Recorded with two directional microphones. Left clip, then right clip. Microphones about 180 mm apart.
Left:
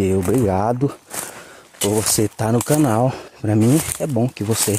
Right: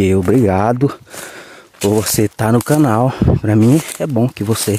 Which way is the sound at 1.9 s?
30° right (ahead or behind).